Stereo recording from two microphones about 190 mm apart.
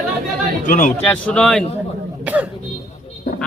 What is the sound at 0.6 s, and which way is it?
Speech, 40° left (ahead or behind).